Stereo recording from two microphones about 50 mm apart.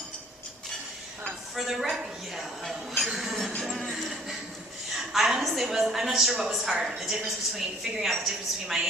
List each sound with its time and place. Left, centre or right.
1.5 s a woman's voice: centre
3.6 s music: centre
4.9 s a woman's voice: centre